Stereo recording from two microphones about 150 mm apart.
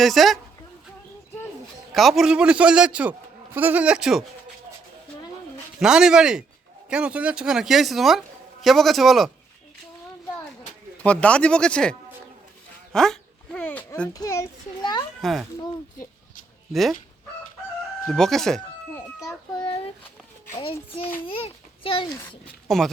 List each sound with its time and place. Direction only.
0.0 s speech: centre (ahead or behind)
1.9 s a man's voice: centre (ahead or behind)
5.8 s speech: 5° right (ahead or behind)
10.9 s speech: 10° left (ahead or behind)
12.9 s a sound: 5° left (ahead or behind)
14.1 s a sound: 20° left (ahead or behind)
15.2 s a child's voice: centre (ahead or behind)
16.7 s speech: centre (ahead or behind)
18.0 s speech: 5° left (ahead or behind)
19.5 s a sound: 40° left (ahead or behind)
20.6 s a child's voice: 40° left (ahead or behind)
22.7 s speech: centre (ahead or behind)